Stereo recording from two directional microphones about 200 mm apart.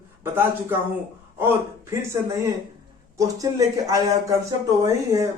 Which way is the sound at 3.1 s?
15° right (ahead or behind).